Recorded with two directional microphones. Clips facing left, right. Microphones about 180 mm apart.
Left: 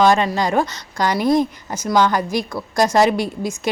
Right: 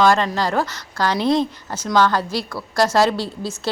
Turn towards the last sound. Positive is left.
turn(degrees=15)  # may be behind; listen again after turning